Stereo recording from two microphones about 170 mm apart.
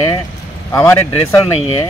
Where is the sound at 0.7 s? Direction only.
15° left (ahead or behind).